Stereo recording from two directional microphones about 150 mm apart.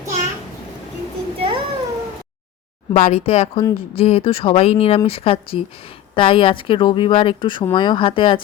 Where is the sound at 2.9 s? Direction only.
50° left (ahead or behind).